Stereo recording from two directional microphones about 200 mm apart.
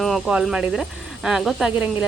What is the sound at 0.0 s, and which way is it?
Speech, centre (ahead or behind).